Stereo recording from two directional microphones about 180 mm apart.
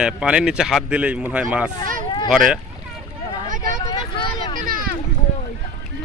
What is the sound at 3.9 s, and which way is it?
Vehicle, 25° left (ahead or behind).